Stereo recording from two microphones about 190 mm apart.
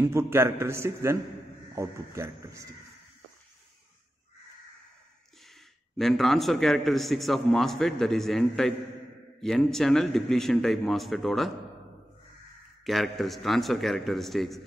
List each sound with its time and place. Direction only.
0.0 s a man's voice: 15° right (ahead or behind)
5.5 s a man's voice: centre (ahead or behind)
12.8 s a man's voice: centre (ahead or behind)